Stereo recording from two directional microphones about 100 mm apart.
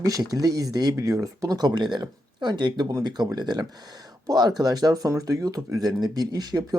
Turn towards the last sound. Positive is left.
turn(degrees=-40)  # may be behind; listen again after turning